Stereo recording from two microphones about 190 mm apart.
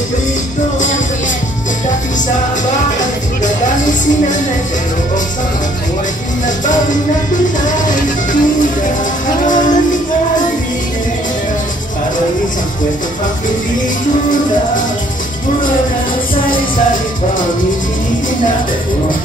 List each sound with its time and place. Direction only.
3.0 s music: 40° left (ahead or behind)
6.6 s music: 40° left (ahead or behind)
16.4 s music: 45° left (ahead or behind)